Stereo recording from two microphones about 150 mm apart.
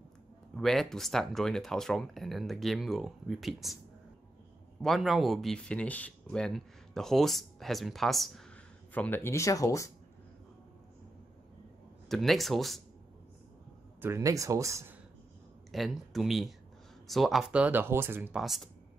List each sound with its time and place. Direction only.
0.6 s speech: centre (ahead or behind)
4.8 s speech: centre (ahead or behind)
8.9 s speech: 10° left (ahead or behind)
12.1 s speech: centre (ahead or behind)
14.0 s speech: 20° right (ahead or behind)
15.7 s speech: centre (ahead or behind)
18.4 s speech: centre (ahead or behind)